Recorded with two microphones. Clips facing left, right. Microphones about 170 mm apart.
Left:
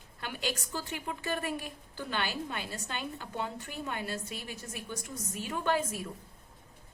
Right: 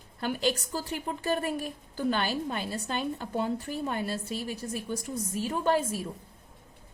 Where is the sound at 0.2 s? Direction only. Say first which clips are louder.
Right 8 dB; 35° right (ahead or behind).